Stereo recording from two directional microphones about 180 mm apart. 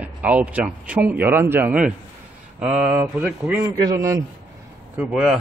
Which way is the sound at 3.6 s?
20° right (ahead or behind).